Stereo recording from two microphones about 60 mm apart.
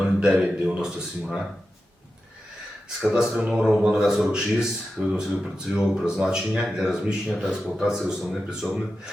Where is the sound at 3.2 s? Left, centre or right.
Centre.